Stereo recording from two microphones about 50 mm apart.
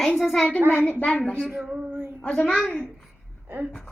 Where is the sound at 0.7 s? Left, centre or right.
Left.